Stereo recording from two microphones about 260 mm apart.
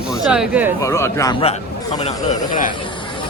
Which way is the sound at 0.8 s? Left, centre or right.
Centre.